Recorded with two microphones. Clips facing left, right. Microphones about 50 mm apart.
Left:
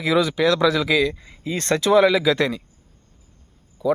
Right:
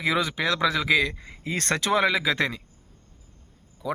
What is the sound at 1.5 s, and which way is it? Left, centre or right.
Speech, right.